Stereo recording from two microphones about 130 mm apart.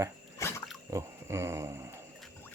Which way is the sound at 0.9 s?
20° right (ahead or behind).